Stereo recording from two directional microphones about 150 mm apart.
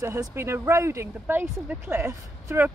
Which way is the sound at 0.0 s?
20° right (ahead or behind).